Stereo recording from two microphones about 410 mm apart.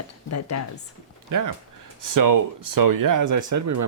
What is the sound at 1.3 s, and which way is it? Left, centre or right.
Speech, right.